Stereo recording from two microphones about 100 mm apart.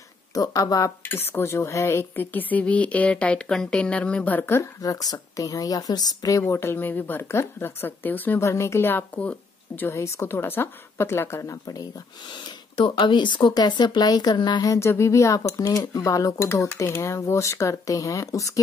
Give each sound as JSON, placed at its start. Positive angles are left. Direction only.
{"t": 0.3, "sound": "a woman's voice", "side_deg": 35}
{"t": 1.0, "sound": "a woman's voice", "side_deg": 25}
{"t": 4.8, "sound": "a woman's voice", "side_deg": 40}
{"t": 6.4, "sound": "speech", "side_deg": 25}
{"t": 9.8, "sound": "a woman's voice", "side_deg": 30}